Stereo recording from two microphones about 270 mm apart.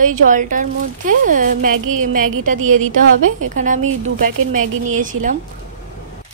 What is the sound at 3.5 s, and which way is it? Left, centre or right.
Speech, right.